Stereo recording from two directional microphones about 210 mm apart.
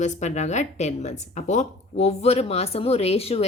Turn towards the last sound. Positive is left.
turn(degrees=30)  # may be behind; listen again after turning